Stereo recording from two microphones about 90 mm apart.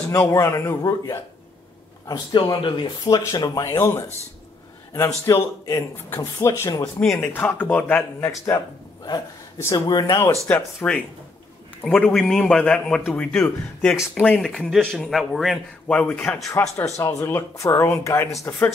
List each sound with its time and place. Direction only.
0.3 s speech: 35° left (ahead or behind)
2.3 s speech: 65° left (ahead or behind)
3.3 s speech: 45° left (ahead or behind)
3.6 s speech: 25° left (ahead or behind)
7.2 s a man's voice: 15° left (ahead or behind)
8.5 s speech: 50° left (ahead or behind)
9.6 s speech: 35° left (ahead or behind)
10.5 s a man's voice: 15° left (ahead or behind)
14.4 s speech: 5° left (ahead or behind)
15.9 s a man's voice: 15° left (ahead or behind)
16.4 s speech: 30° left (ahead or behind)